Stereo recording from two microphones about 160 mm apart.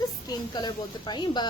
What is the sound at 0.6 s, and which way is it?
Speech, 25° left (ahead or behind).